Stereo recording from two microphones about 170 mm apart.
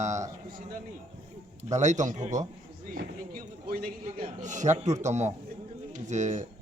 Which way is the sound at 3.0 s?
55° right (ahead or behind).